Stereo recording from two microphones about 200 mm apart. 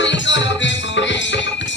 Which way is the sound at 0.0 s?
65° left (ahead or behind).